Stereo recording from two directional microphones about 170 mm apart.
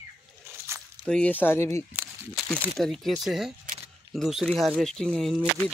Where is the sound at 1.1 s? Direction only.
10° left (ahead or behind).